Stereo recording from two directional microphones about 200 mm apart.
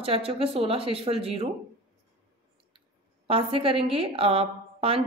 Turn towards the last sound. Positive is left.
turn(degrees=-30)  # may be behind; listen again after turning